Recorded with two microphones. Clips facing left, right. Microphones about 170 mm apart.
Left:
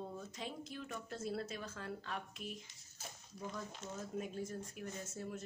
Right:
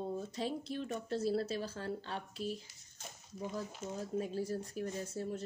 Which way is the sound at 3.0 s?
5° left (ahead or behind).